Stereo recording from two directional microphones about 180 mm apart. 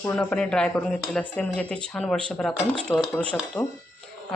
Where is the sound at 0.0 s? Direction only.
10° left (ahead or behind).